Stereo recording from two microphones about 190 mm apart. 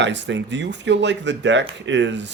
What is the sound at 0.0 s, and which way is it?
Speech, 70° right (ahead or behind).